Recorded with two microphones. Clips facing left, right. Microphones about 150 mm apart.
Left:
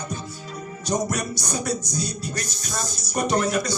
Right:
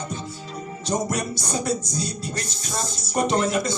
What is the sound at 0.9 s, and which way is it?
Music, 25° right (ahead or behind).